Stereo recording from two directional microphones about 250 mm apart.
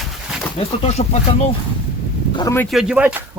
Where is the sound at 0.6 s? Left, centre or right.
Left.